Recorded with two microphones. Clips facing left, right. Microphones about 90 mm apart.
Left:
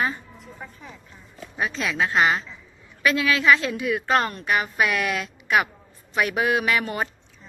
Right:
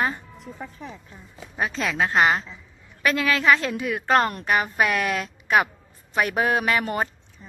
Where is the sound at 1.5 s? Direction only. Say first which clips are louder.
Right 1 dB; 45° right (ahead or behind).